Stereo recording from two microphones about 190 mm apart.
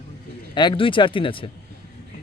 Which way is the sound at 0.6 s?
25° left (ahead or behind).